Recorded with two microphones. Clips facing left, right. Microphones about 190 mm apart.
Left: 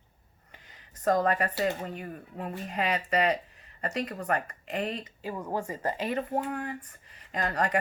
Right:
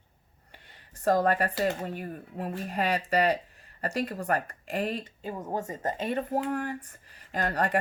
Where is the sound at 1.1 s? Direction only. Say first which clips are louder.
Right 1 dB; 35° right (ahead or behind).